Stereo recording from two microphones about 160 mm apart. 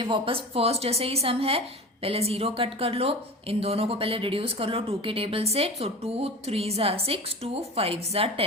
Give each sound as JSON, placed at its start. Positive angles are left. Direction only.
{"t": 0.0, "sound": "a woman's voice", "side_deg": -35}